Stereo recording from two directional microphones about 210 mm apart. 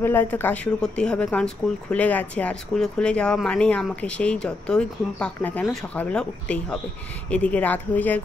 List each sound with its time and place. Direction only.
0.0 s speech: 10° left (ahead or behind)